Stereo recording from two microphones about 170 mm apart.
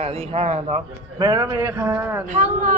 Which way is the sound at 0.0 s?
35° right (ahead or behind).